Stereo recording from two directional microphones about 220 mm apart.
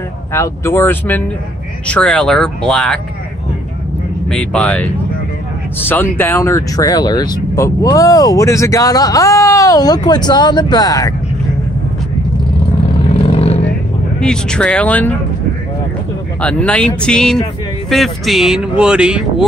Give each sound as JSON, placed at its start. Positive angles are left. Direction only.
{"t": 0.3, "sound": "speech", "side_deg": 10}
{"t": 4.3, "sound": "speech", "side_deg": 5}
{"t": 13.1, "sound": "vehicle", "side_deg": 25}
{"t": 14.2, "sound": "speech", "side_deg": 5}
{"t": 16.3, "sound": "speech", "side_deg": 5}